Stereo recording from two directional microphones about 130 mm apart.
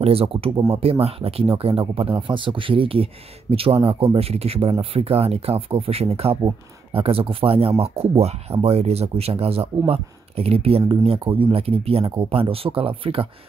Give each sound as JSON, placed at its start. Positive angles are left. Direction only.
{"t": 0.0, "sound": "speech", "side_deg": -50}